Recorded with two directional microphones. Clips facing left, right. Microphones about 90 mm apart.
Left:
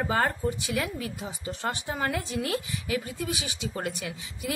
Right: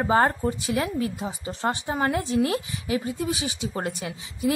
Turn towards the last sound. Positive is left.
turn(degrees=-30)  # may be behind; listen again after turning